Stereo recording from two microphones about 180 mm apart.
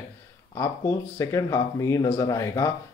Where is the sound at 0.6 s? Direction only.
15° left (ahead or behind).